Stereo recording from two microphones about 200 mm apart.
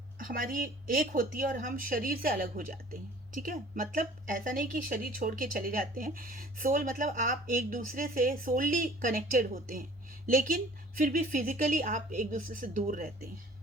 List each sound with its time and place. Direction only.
0.2 s speech: 45° right (ahead or behind)